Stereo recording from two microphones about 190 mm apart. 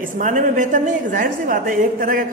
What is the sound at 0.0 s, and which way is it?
A woman's voice, 40° right (ahead or behind).